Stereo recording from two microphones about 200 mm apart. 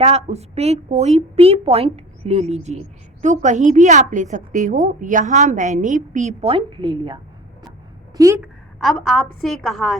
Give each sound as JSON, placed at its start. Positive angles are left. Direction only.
{"t": 0.0, "sound": "a woman's voice", "side_deg": -30}
{"t": 8.8, "sound": "a woman's voice", "side_deg": 0}